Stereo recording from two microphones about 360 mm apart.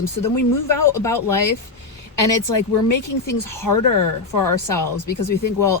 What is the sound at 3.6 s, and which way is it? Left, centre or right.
Speech, left.